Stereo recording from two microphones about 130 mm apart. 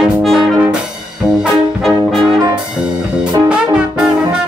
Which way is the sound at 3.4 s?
5° right (ahead or behind).